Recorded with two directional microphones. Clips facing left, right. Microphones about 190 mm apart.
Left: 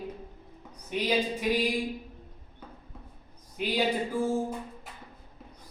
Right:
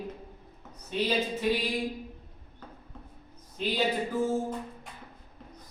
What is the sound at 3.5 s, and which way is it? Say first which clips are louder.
Speech: left 1 dB; 15° left (ahead or behind).